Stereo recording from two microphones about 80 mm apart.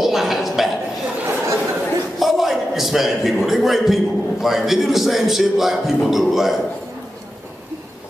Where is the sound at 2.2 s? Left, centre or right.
Centre.